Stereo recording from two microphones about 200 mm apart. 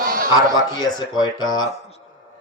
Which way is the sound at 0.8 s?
20° left (ahead or behind).